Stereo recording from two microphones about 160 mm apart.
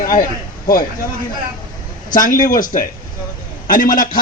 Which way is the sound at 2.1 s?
55° left (ahead or behind).